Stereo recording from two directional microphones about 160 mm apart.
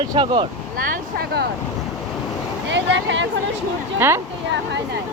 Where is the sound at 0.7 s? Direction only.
60° right (ahead or behind).